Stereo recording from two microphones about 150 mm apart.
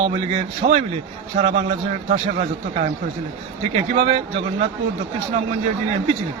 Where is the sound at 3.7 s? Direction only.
40° right (ahead or behind).